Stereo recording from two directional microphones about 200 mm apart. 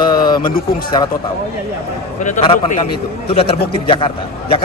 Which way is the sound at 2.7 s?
30° left (ahead or behind).